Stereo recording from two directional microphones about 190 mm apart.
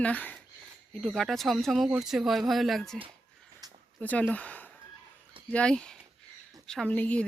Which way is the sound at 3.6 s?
20° right (ahead or behind).